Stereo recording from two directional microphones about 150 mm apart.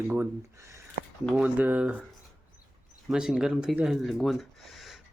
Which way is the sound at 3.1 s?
5° right (ahead or behind).